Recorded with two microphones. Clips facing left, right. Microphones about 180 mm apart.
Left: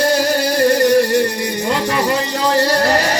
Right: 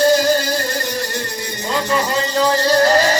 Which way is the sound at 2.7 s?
70° left (ahead or behind).